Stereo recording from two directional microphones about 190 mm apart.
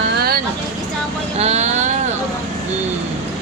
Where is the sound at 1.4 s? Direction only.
35° right (ahead or behind).